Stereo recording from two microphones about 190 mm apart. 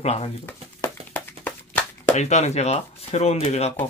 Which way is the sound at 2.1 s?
35° left (ahead or behind).